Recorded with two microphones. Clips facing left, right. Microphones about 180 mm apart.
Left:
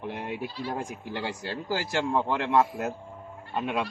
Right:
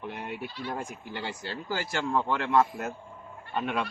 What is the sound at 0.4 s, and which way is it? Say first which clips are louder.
Speech: left 3 dB; 30° left (ahead or behind).